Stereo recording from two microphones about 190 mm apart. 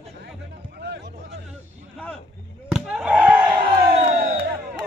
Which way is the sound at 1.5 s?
5° left (ahead or behind).